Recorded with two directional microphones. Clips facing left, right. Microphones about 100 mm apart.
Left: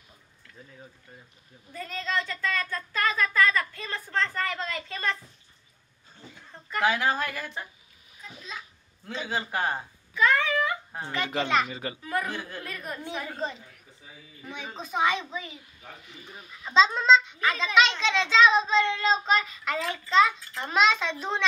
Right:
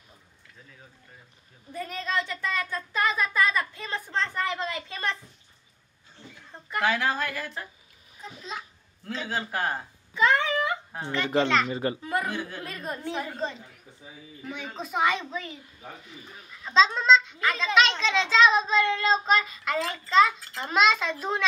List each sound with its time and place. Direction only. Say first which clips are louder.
1.7 s speech: right 1 dB; 20° right (ahead or behind)
6.8 s speech: left 1 dB; 5° left (ahead or behind)
8.2 s a child's voice: right 4 dB; 35° right (ahead or behind)
9.0 s speech: even; 5° left (ahead or behind)
10.1 s a sound: right 1 dB; 25° right (ahead or behind)
10.9 s speech: right 3 dB; 10° left (ahead or behind)
11.7 s a child's voice: right 7 dB; 40° right (ahead or behind)
12.0 s a woman's voice: right 1 dB; 25° right (ahead or behind)
12.3 s speech: right 2 dB; centre (ahead or behind)
12.6 s a woman's voice: right 2 dB; 25° right (ahead or behind)
14.4 s a child's voice: right 2 dB; centre (ahead or behind)